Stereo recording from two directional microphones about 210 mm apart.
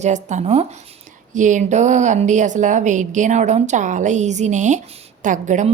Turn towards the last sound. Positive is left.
turn(degrees=-35)  # may be behind; listen again after turning